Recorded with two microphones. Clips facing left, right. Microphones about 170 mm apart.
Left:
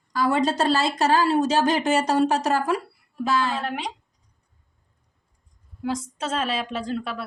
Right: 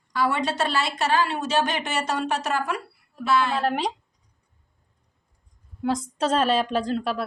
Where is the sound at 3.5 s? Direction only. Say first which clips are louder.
Right 5 dB; 35° right (ahead or behind).